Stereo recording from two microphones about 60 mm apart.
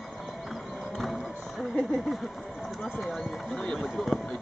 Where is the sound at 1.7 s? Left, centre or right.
Centre.